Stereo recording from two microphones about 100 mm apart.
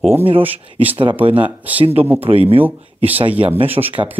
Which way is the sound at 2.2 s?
70° right (ahead or behind).